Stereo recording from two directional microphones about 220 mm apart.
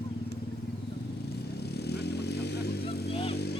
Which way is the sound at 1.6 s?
45° left (ahead or behind).